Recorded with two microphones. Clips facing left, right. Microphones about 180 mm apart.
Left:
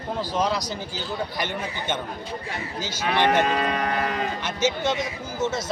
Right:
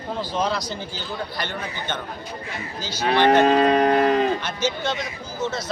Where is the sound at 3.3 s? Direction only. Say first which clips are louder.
Right 6 dB; 30° right (ahead or behind).